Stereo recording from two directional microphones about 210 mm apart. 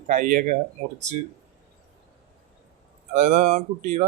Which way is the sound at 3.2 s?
40° right (ahead or behind).